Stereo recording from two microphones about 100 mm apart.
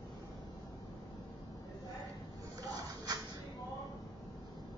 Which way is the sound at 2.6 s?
35° right (ahead or behind).